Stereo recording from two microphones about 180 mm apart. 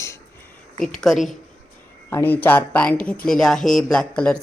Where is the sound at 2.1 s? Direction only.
10° left (ahead or behind).